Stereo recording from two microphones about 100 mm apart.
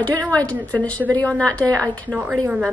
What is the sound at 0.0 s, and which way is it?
A woman's voice, 15° left (ahead or behind).